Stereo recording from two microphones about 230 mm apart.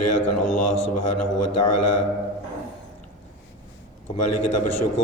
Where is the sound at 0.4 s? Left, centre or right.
Left.